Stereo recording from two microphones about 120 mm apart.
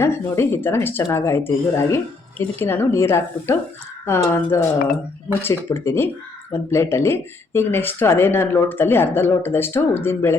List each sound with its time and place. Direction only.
0.0 s speech: 20° left (ahead or behind)